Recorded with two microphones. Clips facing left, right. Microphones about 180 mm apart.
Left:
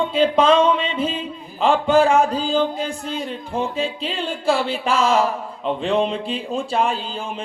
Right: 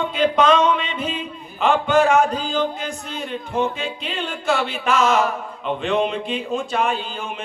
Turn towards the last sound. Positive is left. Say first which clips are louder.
# left 1 dB
turn(degrees=30)  # may be behind; listen again after turning